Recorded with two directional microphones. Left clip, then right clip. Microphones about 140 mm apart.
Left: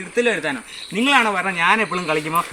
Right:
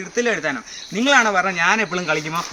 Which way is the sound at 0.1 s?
15° right (ahead or behind).